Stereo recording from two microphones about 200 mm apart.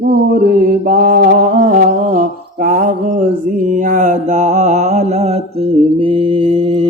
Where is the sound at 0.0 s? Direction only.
50° right (ahead or behind).